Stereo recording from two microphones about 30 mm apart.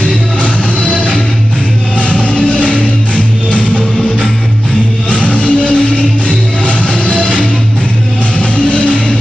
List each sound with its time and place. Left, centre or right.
2.0 s music: left
5.1 s music: left
7.1 s music: left
8.4 s music: left